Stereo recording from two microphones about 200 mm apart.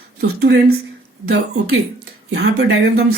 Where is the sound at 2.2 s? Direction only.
60° right (ahead or behind).